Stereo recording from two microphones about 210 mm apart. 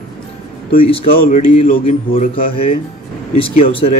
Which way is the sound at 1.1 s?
45° left (ahead or behind).